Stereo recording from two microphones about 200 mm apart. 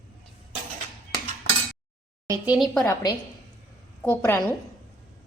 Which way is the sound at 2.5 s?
Centre (ahead or behind).